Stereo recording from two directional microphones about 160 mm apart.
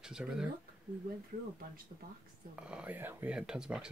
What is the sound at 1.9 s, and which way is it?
Speech, 55° right (ahead or behind).